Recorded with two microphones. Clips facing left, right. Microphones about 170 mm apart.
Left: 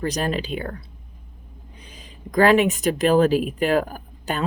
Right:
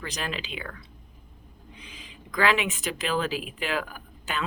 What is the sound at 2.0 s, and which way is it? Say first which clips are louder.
Speech: left 9 dB; 40° left (ahead or behind).